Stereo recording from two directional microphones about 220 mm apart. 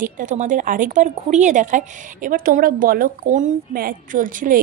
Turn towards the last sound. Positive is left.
turn(degrees=-35)  # may be behind; listen again after turning